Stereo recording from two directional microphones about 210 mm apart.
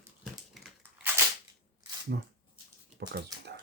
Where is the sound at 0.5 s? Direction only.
Centre (ahead or behind).